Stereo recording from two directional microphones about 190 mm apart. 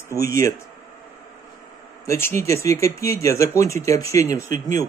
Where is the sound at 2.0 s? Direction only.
15° left (ahead or behind).